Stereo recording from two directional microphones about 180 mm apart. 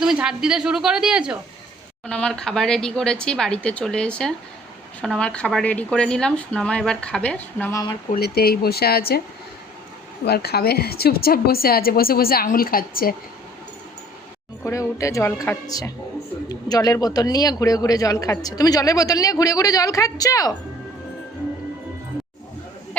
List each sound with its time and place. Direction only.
0.0 s speech: 5° right (ahead or behind)
2.0 s speech: 5° left (ahead or behind)
8.1 s a woman's voice: 60° left (ahead or behind)
10.2 s a woman's voice: 60° left (ahead or behind)
14.6 s speech: 15° left (ahead or behind)